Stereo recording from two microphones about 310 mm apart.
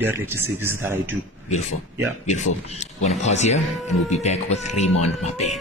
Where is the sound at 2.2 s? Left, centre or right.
Left.